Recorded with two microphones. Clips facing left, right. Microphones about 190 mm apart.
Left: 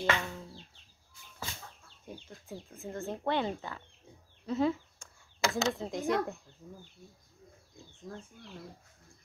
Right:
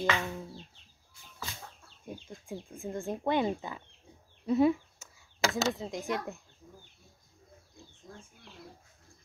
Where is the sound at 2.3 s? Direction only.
15° right (ahead or behind).